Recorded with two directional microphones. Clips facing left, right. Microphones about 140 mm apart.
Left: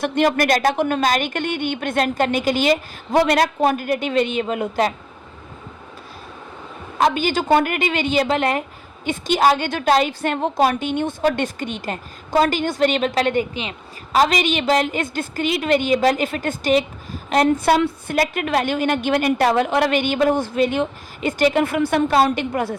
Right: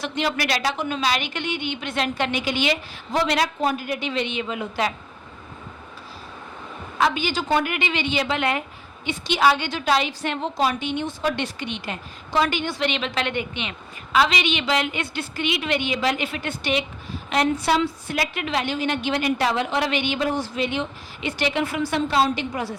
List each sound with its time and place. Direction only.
0.0 s a woman's voice: 50° left (ahead or behind)
7.0 s a woman's voice: 50° left (ahead or behind)